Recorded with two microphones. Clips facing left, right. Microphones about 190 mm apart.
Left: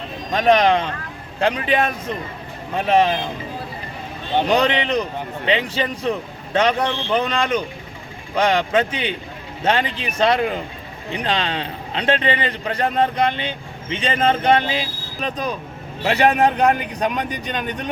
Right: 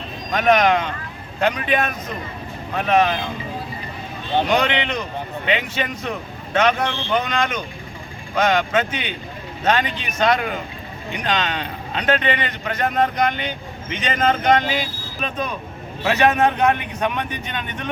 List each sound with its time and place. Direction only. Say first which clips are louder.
0.3 s a man's voice: left 1 dB; 30° left (ahead or behind)
4.4 s a man's voice: left 5 dB; 35° left (ahead or behind)